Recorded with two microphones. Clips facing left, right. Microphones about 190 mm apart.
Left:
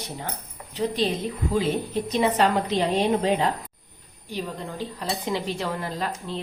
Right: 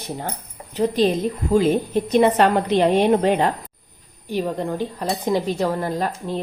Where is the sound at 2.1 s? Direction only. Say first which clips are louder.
Right 6 dB; 55° right (ahead or behind).